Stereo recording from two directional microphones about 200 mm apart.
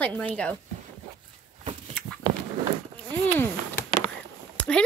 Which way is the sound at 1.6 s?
30° right (ahead or behind).